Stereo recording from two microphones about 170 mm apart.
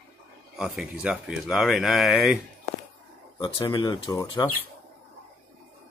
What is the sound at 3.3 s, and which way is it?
Speech, 30° left (ahead or behind).